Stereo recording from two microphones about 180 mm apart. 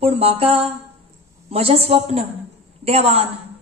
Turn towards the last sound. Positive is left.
turn(degrees=-35)  # may be behind; listen again after turning